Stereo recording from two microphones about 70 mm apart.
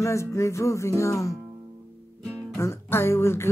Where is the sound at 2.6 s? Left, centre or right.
Left.